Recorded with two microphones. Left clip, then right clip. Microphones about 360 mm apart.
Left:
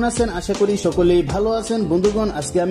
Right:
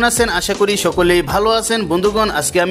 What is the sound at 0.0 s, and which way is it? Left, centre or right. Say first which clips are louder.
Speech: right 6 dB; right.